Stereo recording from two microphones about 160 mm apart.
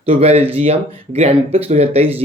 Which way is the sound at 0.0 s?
40° right (ahead or behind).